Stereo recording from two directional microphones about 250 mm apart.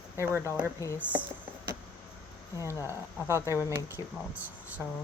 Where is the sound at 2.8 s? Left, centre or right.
Centre.